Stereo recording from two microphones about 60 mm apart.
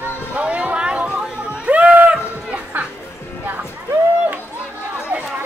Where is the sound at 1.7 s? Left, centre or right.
Right.